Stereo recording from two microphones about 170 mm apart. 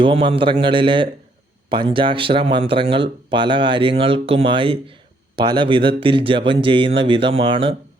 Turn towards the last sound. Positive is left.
turn(degrees=-30)  # may be behind; listen again after turning